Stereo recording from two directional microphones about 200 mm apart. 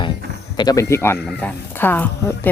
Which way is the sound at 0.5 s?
20° left (ahead or behind).